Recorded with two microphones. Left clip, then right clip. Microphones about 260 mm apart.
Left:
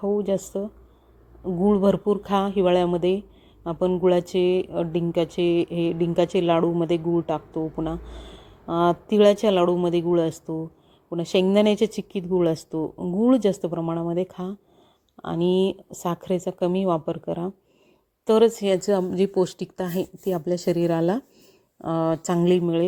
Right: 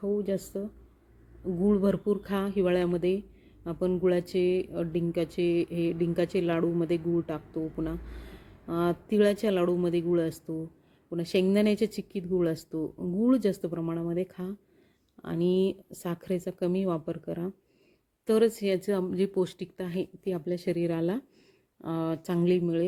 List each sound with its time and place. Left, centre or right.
0.0 s speech: centre
1.6 s a woman's voice: centre